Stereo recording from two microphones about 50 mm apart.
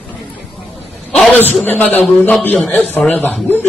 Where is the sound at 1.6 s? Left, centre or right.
Left.